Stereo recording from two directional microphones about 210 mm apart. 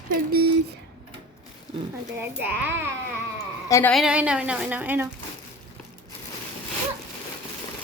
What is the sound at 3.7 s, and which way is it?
Speech, 15° left (ahead or behind).